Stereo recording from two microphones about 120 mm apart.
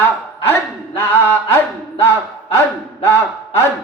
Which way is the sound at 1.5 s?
20° left (ahead or behind).